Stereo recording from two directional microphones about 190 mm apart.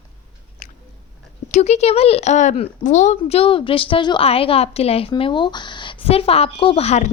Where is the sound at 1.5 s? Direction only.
35° left (ahead or behind).